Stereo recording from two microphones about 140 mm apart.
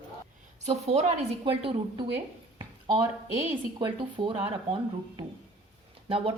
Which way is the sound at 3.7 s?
35° right (ahead or behind).